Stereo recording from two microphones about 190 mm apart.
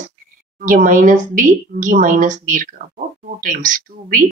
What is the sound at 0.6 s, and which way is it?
A woman's voice, 45° right (ahead or behind).